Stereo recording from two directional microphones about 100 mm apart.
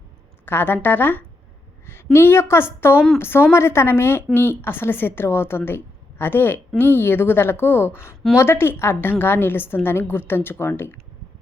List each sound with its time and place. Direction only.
0.4 s a woman's voice: 20° left (ahead or behind)